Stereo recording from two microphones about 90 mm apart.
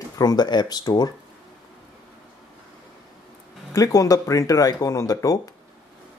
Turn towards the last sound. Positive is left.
turn(degrees=40)  # may be behind; listen again after turning